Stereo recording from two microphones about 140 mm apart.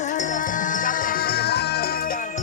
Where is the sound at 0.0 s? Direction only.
60° left (ahead or behind).